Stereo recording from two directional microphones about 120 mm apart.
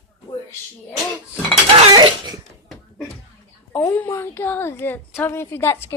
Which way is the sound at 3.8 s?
15° left (ahead or behind).